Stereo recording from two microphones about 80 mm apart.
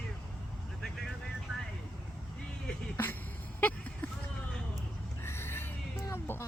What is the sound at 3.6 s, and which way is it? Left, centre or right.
Vehicle, left.